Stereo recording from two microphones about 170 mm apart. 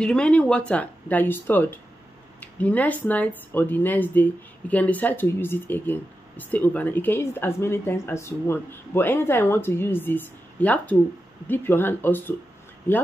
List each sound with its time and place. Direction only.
0.0 s speech: 5° left (ahead or behind)